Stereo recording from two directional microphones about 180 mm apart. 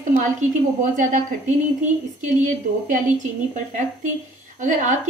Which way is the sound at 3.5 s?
45° right (ahead or behind).